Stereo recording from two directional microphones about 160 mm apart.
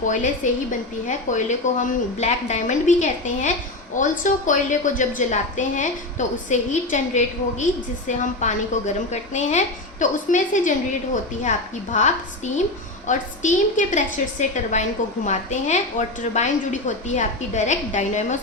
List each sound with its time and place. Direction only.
0.4 s a woman's voice: 50° left (ahead or behind)